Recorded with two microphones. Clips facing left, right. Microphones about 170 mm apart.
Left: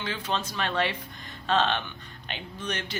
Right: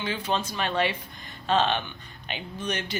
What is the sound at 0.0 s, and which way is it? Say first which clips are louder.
A woman's voice: right 3 dB; 10° right (ahead or behind).